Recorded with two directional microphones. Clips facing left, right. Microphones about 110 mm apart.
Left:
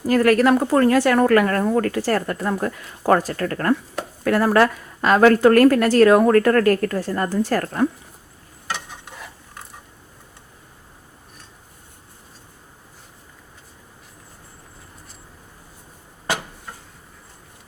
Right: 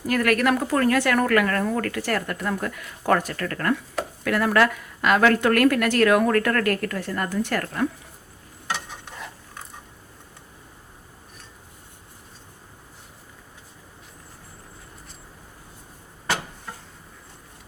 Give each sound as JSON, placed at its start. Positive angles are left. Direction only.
{"t": 0.1, "sound": "speech", "side_deg": 30}
{"t": 9.0, "sound": "stir", "side_deg": 5}